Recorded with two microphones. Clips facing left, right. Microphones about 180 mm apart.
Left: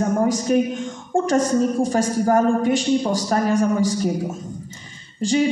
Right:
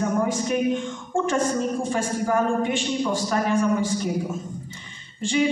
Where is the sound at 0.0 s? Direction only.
40° left (ahead or behind).